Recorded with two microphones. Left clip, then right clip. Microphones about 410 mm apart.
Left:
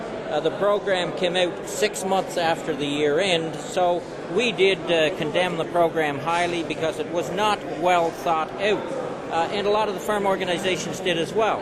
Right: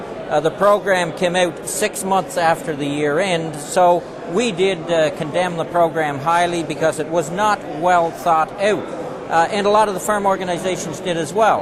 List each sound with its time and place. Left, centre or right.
0.3 s a man's voice: right
9.3 s a man's voice: right
10.1 s a man's voice: right